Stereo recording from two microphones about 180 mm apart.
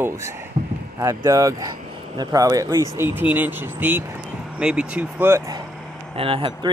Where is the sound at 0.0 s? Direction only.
15° right (ahead or behind).